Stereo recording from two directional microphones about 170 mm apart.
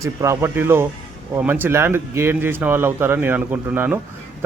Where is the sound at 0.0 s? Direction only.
15° right (ahead or behind).